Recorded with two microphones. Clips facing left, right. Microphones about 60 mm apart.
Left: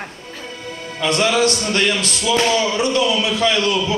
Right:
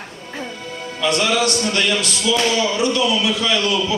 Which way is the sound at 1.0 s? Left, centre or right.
Left.